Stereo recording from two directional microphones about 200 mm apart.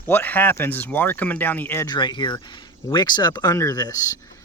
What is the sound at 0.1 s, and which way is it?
Speech, 10° left (ahead or behind).